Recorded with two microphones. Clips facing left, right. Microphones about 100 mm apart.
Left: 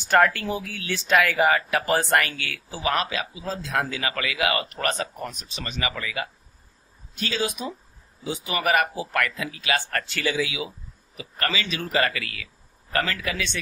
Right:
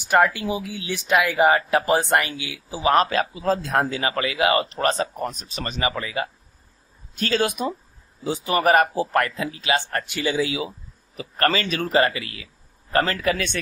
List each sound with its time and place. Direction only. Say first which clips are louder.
0.0 s speech: right 1 dB; 15° right (ahead or behind)
2.9 s a man's voice: right 7 dB; 40° right (ahead or behind)
3.7 s speech: right 4 dB; 30° right (ahead or behind)
7.2 s a man's voice: right 5 dB; 45° right (ahead or behind)
8.2 s speech: right 6 dB; 35° right (ahead or behind); by 10.3 s 20° right (ahead or behind)
10.3 s speech: right 4 dB; 35° right (ahead or behind)
11.1 s a man's voice: right 6 dB; 45° right (ahead or behind)
11.9 s speech: right 4 dB; 25° right (ahead or behind)
12.9 s speech: right 5 dB; 35° right (ahead or behind)